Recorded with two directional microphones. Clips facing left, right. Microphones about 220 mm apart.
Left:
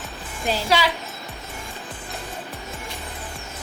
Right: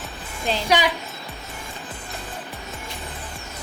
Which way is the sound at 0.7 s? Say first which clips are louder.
Right 1 dB; 15° right (ahead or behind).